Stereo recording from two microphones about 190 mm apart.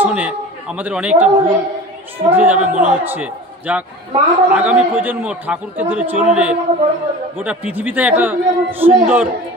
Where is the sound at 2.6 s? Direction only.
40° right (ahead or behind).